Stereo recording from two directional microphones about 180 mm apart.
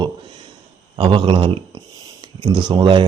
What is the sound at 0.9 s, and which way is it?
Speech, 25° right (ahead or behind).